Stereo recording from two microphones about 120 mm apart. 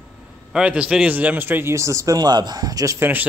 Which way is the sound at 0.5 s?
10° right (ahead or behind).